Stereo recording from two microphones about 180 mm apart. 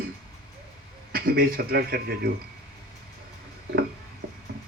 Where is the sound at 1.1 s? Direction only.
55° right (ahead or behind).